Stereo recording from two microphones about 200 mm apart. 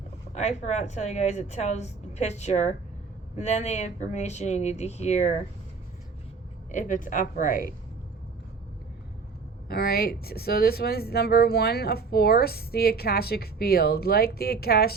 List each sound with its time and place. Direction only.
0.3 s a woman's voice: 35° left (ahead or behind)
6.7 s a woman's voice: 40° left (ahead or behind)
9.6 s speech: 50° left (ahead or behind)